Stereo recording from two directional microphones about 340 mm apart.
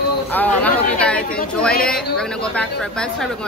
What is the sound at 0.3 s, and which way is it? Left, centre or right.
Speech, centre.